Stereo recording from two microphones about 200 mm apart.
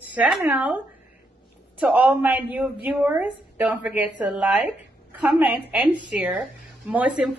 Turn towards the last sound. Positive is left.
turn(degrees=-5)  # may be behind; listen again after turning